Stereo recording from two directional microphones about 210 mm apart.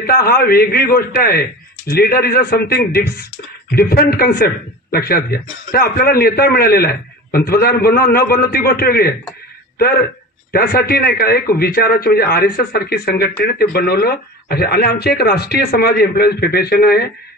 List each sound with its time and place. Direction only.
0.0 s a man's voice: 45° left (ahead or behind)